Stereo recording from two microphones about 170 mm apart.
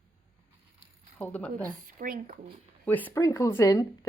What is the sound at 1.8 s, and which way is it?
Speech, 55° right (ahead or behind).